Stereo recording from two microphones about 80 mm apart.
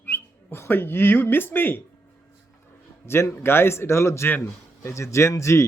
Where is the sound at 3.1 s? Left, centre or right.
Left.